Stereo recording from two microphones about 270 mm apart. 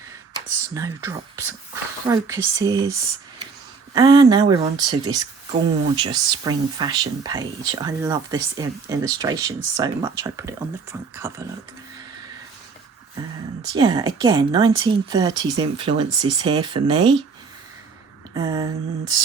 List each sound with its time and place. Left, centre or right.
0.3 s speech: centre
3.9 s speech: centre
13.6 s speech: centre
18.3 s speech: centre